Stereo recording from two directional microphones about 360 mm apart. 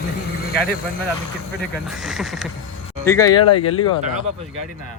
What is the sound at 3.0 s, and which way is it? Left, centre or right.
Speech, centre.